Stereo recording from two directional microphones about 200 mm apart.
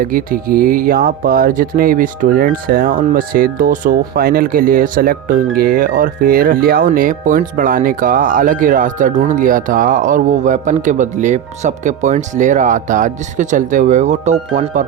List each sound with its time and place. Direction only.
0.0 s speech: 45° right (ahead or behind)